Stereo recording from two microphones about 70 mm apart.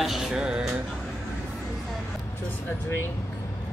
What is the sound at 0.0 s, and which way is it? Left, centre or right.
Music, centre.